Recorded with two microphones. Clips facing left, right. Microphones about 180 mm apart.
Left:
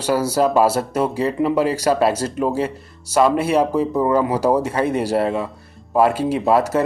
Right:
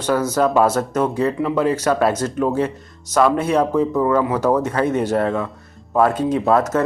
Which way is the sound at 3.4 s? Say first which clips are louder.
Even; 10° left (ahead or behind).